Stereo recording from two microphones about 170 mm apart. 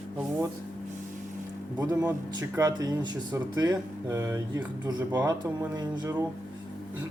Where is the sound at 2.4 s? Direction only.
20° right (ahead or behind).